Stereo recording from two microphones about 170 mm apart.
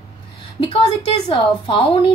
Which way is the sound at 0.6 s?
35° left (ahead or behind).